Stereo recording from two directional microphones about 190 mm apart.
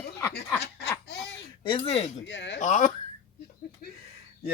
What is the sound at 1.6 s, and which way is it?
Speech, 30° left (ahead or behind).